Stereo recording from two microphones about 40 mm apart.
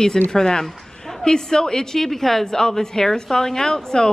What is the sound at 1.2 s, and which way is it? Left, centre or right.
A woman's voice, centre.